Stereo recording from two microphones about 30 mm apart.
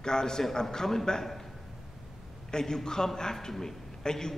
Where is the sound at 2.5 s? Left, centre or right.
Left.